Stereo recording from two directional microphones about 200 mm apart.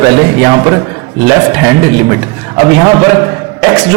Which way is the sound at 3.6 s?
15° right (ahead or behind).